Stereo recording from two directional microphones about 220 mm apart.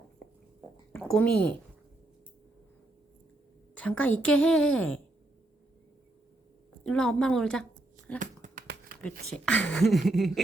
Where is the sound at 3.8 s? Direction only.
5° left (ahead or behind).